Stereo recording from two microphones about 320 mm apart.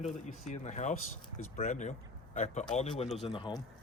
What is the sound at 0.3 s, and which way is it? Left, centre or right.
Speech, left.